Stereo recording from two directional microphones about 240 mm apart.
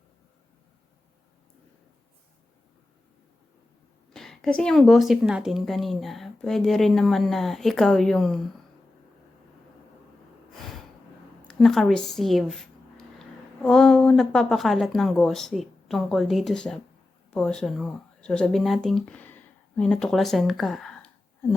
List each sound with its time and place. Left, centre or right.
4.1 s speech: centre
11.4 s speech: centre